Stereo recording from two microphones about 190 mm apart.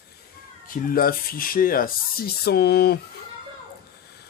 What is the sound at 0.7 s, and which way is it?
Speech, 50° left (ahead or behind).